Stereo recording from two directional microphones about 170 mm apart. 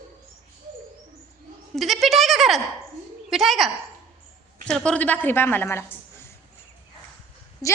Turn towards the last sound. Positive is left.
turn(degrees=20)  # may be behind; listen again after turning